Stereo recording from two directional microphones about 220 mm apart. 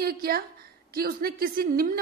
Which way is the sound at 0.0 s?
45° right (ahead or behind).